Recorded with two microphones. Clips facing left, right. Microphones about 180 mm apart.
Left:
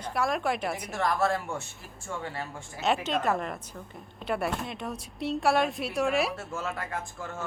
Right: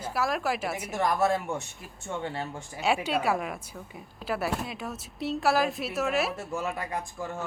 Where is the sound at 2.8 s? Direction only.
10° right (ahead or behind).